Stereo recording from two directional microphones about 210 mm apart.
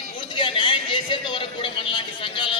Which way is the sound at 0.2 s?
25° left (ahead or behind).